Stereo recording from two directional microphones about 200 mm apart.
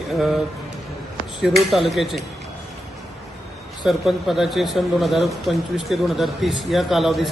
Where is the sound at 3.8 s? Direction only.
Centre (ahead or behind).